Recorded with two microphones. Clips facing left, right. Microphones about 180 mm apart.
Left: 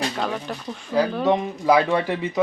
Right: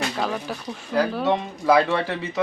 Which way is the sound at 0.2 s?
5° right (ahead or behind).